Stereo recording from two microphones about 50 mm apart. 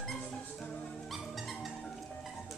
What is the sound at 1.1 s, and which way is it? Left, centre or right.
Music, centre.